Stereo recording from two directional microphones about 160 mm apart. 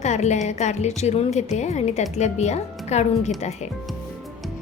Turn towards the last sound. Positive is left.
turn(degrees=45)  # may be behind; listen again after turning